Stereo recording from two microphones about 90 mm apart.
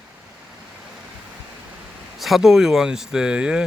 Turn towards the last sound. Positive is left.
turn(degrees=-10)  # may be behind; listen again after turning